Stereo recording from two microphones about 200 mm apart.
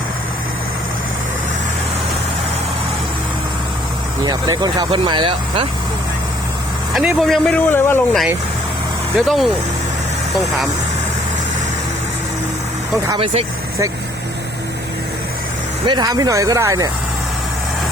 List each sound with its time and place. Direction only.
4.2 s speech: 20° right (ahead or behind)
6.9 s speech: centre (ahead or behind)
9.1 s speech: centre (ahead or behind)
13.1 s speech: 25° right (ahead or behind)
15.9 s speech: 20° right (ahead or behind)